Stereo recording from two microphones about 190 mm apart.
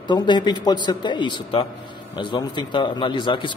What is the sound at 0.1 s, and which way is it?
A man's voice, 25° left (ahead or behind).